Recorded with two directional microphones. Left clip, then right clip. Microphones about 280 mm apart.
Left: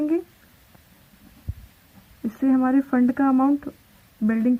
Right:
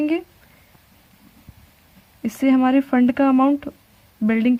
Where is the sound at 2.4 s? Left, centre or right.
Right.